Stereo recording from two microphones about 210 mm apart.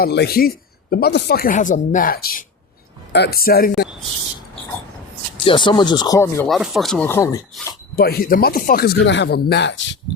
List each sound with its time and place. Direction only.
0.0 s speech: 50° left (ahead or behind)
5.5 s speech: 20° left (ahead or behind)
6.5 s speech: centre (ahead or behind)
7.9 s speech: 45° left (ahead or behind)